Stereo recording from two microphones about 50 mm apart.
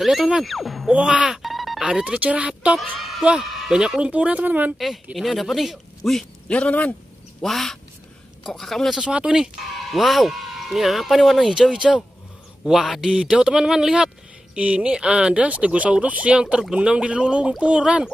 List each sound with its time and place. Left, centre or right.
0.0 s speech: centre
1.1 s speech: centre
1.4 s music: centre
1.8 s speech: centre
2.1 s speech: right
2.8 s speech: centre
3.7 s speech: centre
4.1 s speech: right
4.7 s speech: centre
7.4 s speech: centre
9.1 s speech: centre
9.8 s speech: centre
13.0 s speech: centre